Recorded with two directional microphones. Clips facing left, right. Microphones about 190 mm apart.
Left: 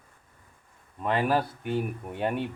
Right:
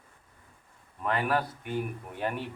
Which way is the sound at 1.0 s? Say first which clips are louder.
Left 3 dB; 25° left (ahead or behind).